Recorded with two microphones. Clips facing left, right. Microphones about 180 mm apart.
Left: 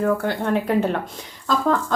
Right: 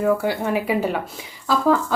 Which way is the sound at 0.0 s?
10° right (ahead or behind).